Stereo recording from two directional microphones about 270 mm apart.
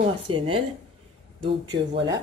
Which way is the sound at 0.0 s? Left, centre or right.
Right.